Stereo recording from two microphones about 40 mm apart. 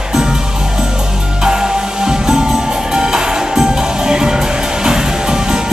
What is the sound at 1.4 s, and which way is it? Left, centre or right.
Music, centre.